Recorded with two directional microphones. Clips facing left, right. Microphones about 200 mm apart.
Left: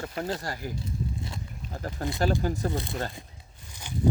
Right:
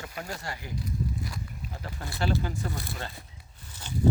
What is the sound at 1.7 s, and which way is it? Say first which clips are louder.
Speech: left 11 dB; 45° left (ahead or behind).